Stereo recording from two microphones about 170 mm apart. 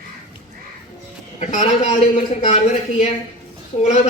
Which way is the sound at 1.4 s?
40° left (ahead or behind).